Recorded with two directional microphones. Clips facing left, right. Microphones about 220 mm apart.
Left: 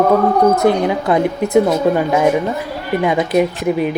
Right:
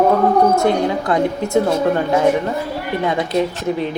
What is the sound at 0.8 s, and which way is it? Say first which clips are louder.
Speech: left 2 dB; 20° left (ahead or behind).